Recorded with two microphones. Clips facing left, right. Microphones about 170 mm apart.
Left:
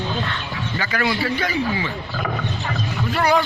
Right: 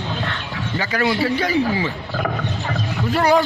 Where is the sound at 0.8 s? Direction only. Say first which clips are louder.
Right 3 dB; 30° right (ahead or behind).